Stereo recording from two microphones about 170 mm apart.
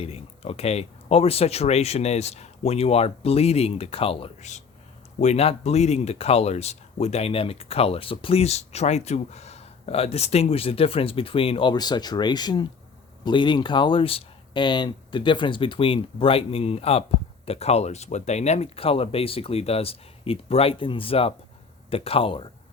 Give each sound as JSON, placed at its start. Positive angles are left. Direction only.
{"t": 0.0, "sound": "speech", "side_deg": 35}